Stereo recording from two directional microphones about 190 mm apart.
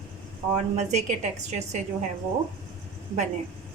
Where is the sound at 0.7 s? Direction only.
40° right (ahead or behind).